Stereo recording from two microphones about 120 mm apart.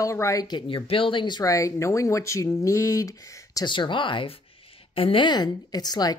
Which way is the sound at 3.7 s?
40° left (ahead or behind).